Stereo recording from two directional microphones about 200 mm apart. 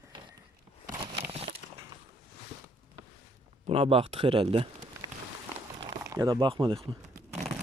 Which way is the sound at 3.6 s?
30° right (ahead or behind).